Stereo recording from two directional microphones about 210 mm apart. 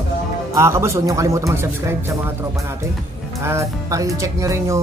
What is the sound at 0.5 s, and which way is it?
A man's voice, 15° right (ahead or behind).